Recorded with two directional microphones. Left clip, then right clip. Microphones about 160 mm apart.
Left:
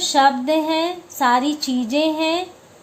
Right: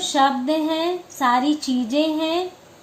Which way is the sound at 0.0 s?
80° left.